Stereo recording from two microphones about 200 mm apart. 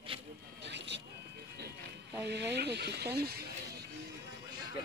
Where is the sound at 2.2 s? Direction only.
60° right (ahead or behind).